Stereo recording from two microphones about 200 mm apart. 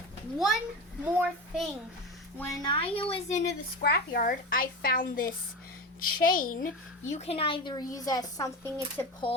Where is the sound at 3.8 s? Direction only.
55° left (ahead or behind).